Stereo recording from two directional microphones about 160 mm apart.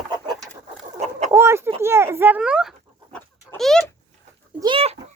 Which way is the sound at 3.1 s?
5° left (ahead or behind).